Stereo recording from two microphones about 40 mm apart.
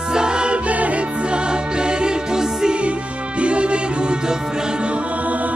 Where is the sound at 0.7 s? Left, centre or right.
Right; by 2.7 s centre.